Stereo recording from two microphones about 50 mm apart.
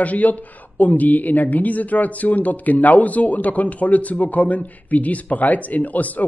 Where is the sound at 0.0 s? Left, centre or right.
Left.